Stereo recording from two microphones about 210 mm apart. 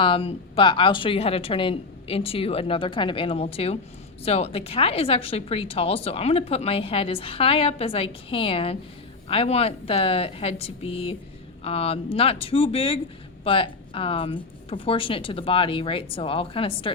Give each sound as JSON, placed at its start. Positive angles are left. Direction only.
{"t": 0.0, "sound": "a woman's voice", "side_deg": 25}